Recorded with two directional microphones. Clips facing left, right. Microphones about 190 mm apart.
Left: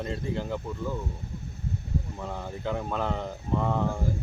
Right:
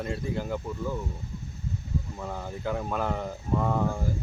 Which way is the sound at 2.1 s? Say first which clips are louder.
Even; 5° right (ahead or behind).